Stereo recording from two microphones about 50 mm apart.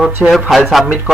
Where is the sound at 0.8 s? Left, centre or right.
Centre.